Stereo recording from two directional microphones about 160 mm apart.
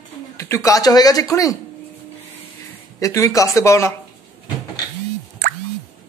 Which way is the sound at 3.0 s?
20° left (ahead or behind).